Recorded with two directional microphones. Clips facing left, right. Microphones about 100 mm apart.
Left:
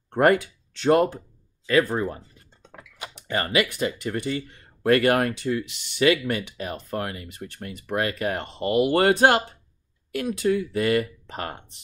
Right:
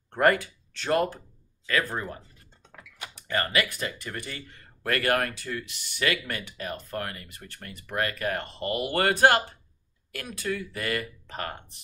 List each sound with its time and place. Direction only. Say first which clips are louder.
0.1 s speech: left 4 dB; 20° left (ahead or behind)